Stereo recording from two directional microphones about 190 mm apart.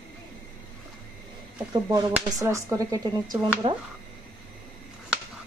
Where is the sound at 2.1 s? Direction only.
15° right (ahead or behind).